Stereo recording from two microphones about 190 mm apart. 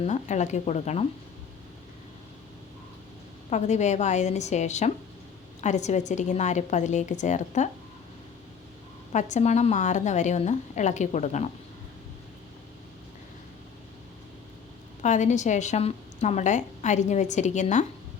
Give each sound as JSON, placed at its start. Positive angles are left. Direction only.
{"t": 0.0, "sound": "a woman's voice", "side_deg": 35}
{"t": 3.5, "sound": "a woman's voice", "side_deg": 40}
{"t": 9.1, "sound": "a woman's voice", "side_deg": 40}
{"t": 15.0, "sound": "a woman's voice", "side_deg": 40}